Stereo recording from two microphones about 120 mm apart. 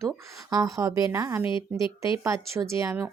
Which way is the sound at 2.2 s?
25° right (ahead or behind).